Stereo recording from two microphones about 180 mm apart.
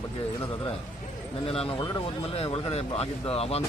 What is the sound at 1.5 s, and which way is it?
Speech, 30° left (ahead or behind).